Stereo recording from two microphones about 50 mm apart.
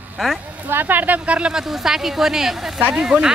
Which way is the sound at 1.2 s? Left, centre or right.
Centre.